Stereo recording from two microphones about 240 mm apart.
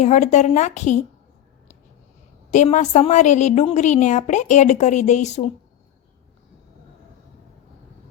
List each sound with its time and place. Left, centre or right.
0.0 s a woman's voice: left
2.5 s a woman's voice: left